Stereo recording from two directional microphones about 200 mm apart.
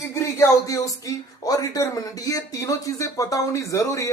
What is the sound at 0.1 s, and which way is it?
Speech, 15° left (ahead or behind).